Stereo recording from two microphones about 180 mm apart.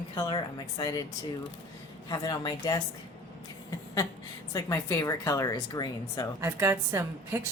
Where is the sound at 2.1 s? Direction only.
20° left (ahead or behind).